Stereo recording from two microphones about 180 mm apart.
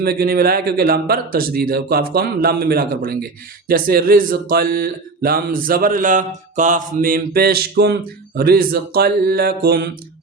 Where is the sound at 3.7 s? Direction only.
55° right (ahead or behind).